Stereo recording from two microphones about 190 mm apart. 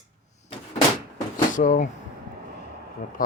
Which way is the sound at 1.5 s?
40° left (ahead or behind).